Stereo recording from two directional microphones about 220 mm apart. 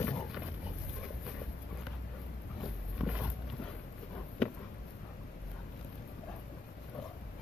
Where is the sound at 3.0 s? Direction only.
5° right (ahead or behind).